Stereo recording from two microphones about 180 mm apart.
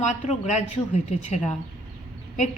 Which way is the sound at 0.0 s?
40° left (ahead or behind).